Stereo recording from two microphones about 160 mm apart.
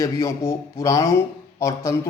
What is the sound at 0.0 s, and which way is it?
A man's voice, 20° left (ahead or behind).